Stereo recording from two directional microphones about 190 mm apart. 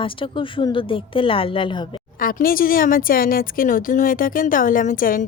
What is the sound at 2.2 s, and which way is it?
A woman's voice, 45° left (ahead or behind).